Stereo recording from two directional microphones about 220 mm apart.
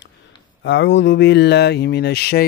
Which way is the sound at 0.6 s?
55° left (ahead or behind).